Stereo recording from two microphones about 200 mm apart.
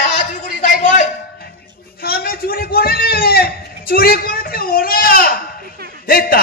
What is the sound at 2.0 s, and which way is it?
A man's voice, 50° left (ahead or behind).